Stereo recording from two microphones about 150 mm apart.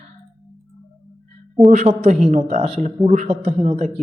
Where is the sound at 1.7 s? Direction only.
50° right (ahead or behind).